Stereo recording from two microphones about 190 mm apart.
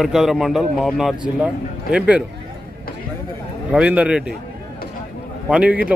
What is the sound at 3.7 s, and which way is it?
Speech, 5° right (ahead or behind).